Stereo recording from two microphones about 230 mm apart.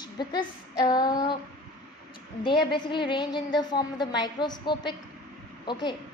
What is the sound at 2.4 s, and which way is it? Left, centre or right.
A woman's voice, centre.